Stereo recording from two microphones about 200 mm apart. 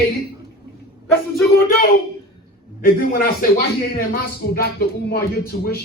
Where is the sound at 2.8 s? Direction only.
50° left (ahead or behind).